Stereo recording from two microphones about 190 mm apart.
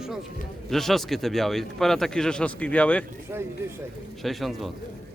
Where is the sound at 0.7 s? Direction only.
Centre (ahead or behind).